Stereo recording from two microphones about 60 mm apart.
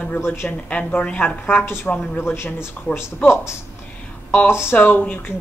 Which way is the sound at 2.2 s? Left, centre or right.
Left.